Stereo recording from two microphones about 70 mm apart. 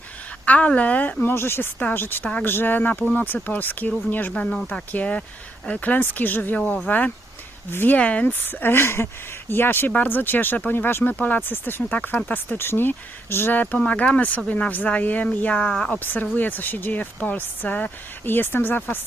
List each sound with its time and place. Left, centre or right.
0.4 s speech: left
1.3 s speech: left; by 16.0 s centre
16.0 s speech: left